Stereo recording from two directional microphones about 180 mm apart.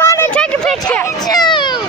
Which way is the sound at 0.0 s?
15° left (ahead or behind).